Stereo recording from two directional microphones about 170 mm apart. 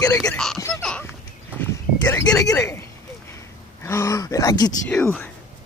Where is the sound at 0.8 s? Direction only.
5° left (ahead or behind).